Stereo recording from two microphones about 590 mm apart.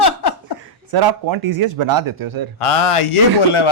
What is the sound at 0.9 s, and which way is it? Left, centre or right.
Speech, right.